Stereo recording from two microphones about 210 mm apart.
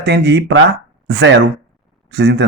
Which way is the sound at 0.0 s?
50° right (ahead or behind).